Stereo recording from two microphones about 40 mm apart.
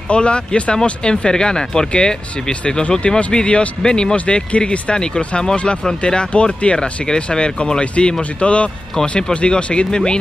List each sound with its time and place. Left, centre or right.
0.1 s speech: left